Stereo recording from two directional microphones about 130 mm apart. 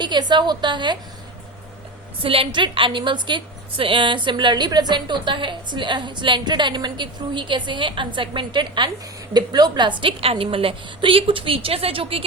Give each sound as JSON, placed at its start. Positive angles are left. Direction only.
{"t": 0.0, "sound": "a woman's voice", "side_deg": -35}
{"t": 2.2, "sound": "a woman's voice", "side_deg": -45}